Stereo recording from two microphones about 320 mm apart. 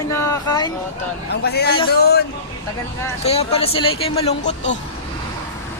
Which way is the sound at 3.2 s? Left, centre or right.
Centre.